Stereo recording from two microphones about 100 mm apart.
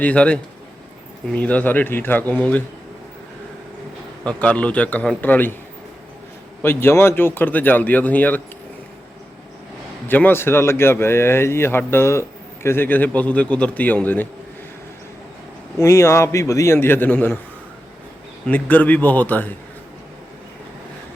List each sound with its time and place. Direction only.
0.0 s a man's voice: 15° left (ahead or behind)
4.3 s a man's voice: 10° left (ahead or behind)
6.6 s speech: 25° left (ahead or behind)
10.1 s a man's voice: 20° left (ahead or behind)
15.8 s speech: 30° left (ahead or behind)
18.4 s a man's voice: 15° left (ahead or behind)